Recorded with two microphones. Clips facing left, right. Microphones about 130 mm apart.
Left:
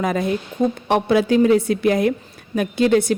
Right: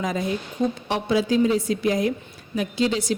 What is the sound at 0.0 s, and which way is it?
A woman's voice, 60° left (ahead or behind).